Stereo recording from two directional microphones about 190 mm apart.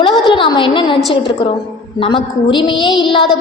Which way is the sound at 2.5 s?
25° left (ahead or behind).